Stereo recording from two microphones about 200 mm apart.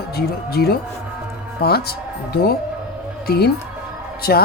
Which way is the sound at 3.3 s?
50° left (ahead or behind).